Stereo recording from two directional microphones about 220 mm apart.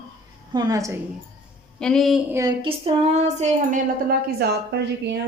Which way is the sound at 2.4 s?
20° right (ahead or behind).